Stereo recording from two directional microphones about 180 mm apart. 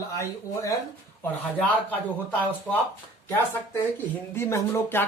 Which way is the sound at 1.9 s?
10° left (ahead or behind).